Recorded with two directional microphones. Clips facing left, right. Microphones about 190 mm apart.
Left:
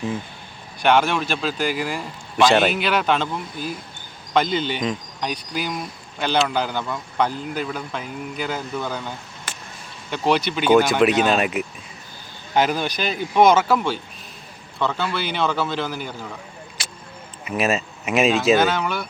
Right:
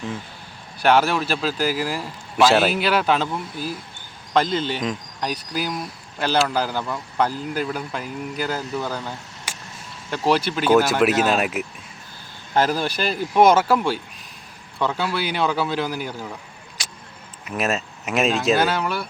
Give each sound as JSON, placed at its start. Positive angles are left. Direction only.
{"t": 0.8, "sound": "speech", "side_deg": -5}
{"t": 17.4, "sound": "speech", "side_deg": 0}